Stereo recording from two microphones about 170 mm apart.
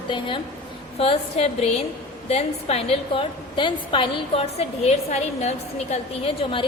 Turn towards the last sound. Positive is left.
turn(degrees=35)  # may be behind; listen again after turning